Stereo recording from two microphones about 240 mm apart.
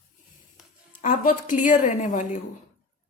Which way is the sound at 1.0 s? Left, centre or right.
Left.